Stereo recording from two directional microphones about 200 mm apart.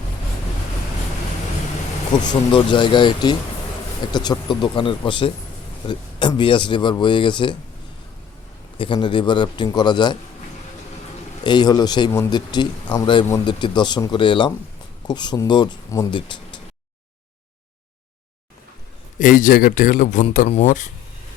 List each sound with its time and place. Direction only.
2.1 s a man's voice: 20° left (ahead or behind)
8.8 s a man's voice: 25° left (ahead or behind)
11.4 s a man's voice: 20° left (ahead or behind)
19.2 s speech: 40° left (ahead or behind)